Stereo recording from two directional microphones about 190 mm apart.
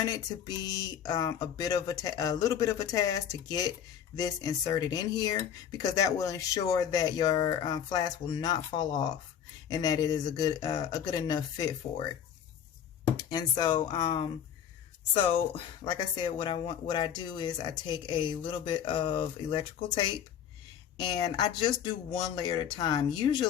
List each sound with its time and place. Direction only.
0.0 s speech: 20° left (ahead or behind)
13.3 s speech: 25° left (ahead or behind)
21.3 s speech: 25° left (ahead or behind)